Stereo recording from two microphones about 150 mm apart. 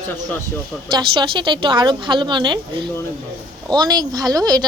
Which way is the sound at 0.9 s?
30° right (ahead or behind).